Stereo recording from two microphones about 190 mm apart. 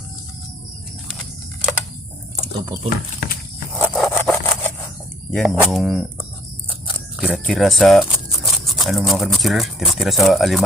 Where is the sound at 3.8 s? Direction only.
Centre (ahead or behind).